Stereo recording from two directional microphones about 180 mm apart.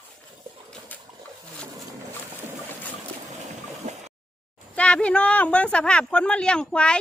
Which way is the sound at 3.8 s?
40° right (ahead or behind).